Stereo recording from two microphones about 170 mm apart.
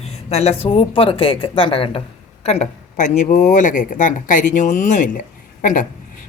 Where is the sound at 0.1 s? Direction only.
40° left (ahead or behind).